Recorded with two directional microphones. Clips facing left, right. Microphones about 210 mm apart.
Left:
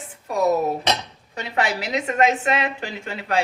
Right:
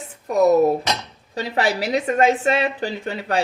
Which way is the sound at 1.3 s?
35° right (ahead or behind).